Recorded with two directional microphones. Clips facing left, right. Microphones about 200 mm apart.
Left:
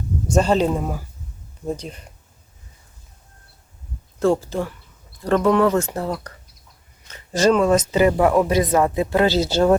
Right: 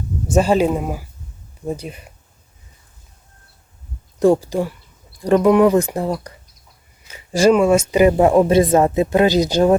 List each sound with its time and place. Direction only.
0.3 s speech: 10° right (ahead or behind)
4.2 s speech: 15° right (ahead or behind)